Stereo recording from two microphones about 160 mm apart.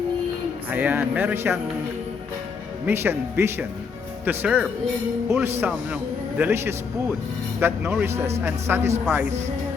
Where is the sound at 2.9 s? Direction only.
15° right (ahead or behind).